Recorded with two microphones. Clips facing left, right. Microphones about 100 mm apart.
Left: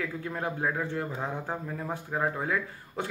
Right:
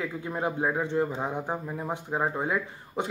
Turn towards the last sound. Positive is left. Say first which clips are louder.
# right 3 dB
turn(degrees=-20)  # may be behind; listen again after turning